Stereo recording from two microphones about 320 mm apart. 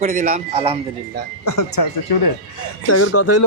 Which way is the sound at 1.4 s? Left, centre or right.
Left.